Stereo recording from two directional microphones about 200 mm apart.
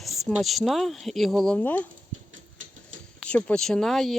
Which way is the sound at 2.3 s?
80° right.